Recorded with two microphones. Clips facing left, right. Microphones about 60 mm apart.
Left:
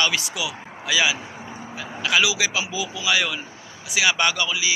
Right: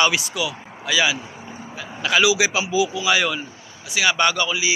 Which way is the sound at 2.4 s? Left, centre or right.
Centre.